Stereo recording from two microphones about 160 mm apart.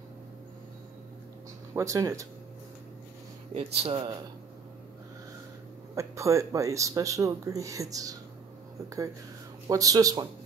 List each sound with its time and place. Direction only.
1.7 s speech: 20° right (ahead or behind)
3.8 s speech: 30° right (ahead or behind)
5.9 s speech: 20° right (ahead or behind)